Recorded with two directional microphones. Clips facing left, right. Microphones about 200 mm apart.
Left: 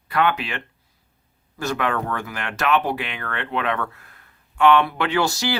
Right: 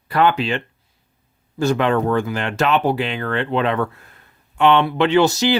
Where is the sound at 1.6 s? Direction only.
25° right (ahead or behind).